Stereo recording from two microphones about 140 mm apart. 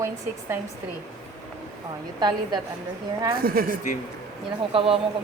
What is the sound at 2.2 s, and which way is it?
Speech, 30° right (ahead or behind).